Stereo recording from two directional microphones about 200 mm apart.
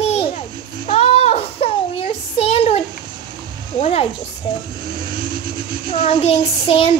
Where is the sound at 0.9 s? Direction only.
30° left (ahead or behind).